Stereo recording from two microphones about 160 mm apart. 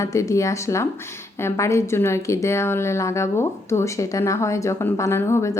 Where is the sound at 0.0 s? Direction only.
20° left (ahead or behind).